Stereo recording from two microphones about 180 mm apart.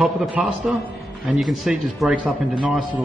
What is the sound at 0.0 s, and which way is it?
A man's voice, 5° right (ahead or behind).